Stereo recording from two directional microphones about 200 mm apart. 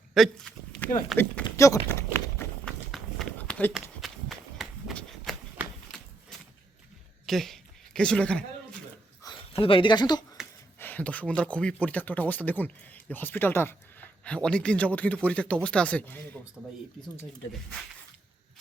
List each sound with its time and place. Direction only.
0.1 s a sound: centre (ahead or behind)
1.1 s speech: centre (ahead or behind)
1.5 s speech: 15° left (ahead or behind)
1.9 s a sound: 15° left (ahead or behind)
2.9 s run: centre (ahead or behind)
7.3 s speech: centre (ahead or behind)
9.2 s speech: 25° left (ahead or behind)
10.8 s speech: 10° left (ahead or behind)